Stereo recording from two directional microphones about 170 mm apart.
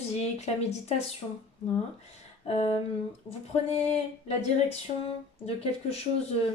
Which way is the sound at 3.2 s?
40° left (ahead or behind).